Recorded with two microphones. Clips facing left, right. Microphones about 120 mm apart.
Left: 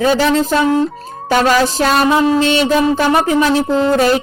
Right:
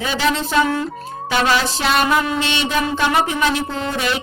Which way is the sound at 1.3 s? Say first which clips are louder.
Left 6 dB; 45° left (ahead or behind).